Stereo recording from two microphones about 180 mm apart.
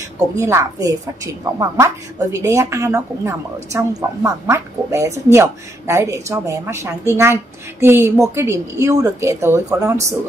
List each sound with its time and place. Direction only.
0.4 s a woman's voice: 15° right (ahead or behind)